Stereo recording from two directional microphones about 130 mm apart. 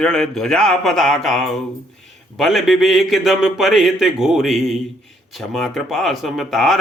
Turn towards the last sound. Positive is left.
turn(degrees=0)  # may be behind; listen again after turning